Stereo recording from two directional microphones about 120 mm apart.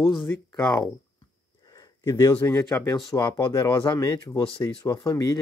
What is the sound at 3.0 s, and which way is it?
Speech, 30° left (ahead or behind).